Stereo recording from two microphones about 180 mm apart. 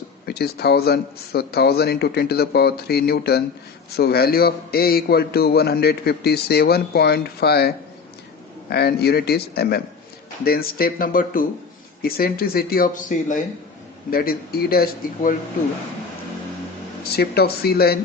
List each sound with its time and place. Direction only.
0.3 s a man's voice: 60° left (ahead or behind)
8.7 s a man's voice: 65° left (ahead or behind); by 13.4 s 45° left (ahead or behind)
14.1 s a man's voice: 55° left (ahead or behind)
17.1 s a man's voice: 60° left (ahead or behind)